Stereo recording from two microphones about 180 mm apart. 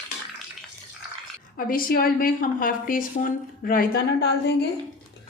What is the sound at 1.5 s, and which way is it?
A woman's voice, 50° left (ahead or behind).